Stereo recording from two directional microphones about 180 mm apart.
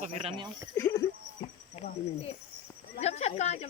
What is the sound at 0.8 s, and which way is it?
Speech, 15° left (ahead or behind).